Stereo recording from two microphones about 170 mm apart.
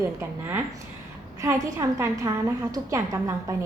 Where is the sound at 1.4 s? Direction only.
15° right (ahead or behind).